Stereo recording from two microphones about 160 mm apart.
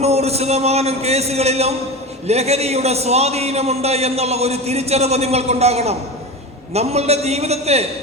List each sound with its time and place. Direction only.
0.0 s a man's voice: 40° right (ahead or behind)